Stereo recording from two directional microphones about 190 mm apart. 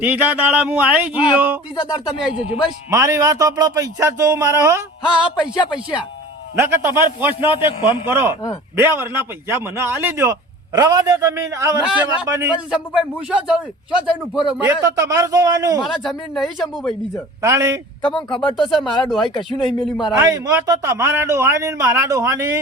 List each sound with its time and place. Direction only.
0.0 s a man's voice: 10° right (ahead or behind)
1.7 s speech: 25° left (ahead or behind)
2.9 s a man's voice: 15° right (ahead or behind)
5.0 s a man's voice: 5° right (ahead or behind)
12.5 s speech: 5° right (ahead or behind)
14.7 s a man's voice: 15° right (ahead or behind)
15.8 s speech: centre (ahead or behind)
17.4 s a man's voice: 15° right (ahead or behind)
18.0 s speech: 25° left (ahead or behind)
18.5 s speech: centre (ahead or behind)
20.1 s a man's voice: 20° right (ahead or behind)